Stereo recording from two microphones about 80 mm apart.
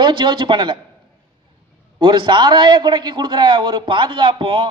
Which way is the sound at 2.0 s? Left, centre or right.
Right.